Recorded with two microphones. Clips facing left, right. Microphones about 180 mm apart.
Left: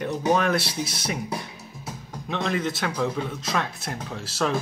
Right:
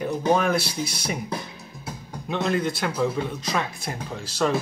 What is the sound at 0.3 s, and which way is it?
Speech, 5° right (ahead or behind).